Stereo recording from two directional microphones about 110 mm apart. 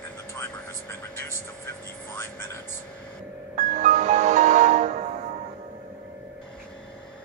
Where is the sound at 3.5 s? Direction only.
90° right.